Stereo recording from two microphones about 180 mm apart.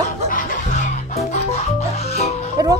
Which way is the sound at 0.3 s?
50° left (ahead or behind).